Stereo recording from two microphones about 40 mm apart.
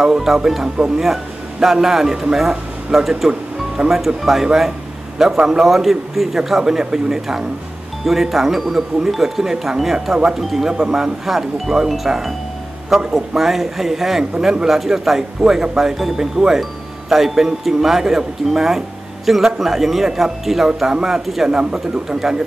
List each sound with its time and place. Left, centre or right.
0.0 s a man's voice: centre
3.3 s music: right
3.9 s speech: centre
5.7 s speech: centre
13.0 s speech: right
13.4 s speech: centre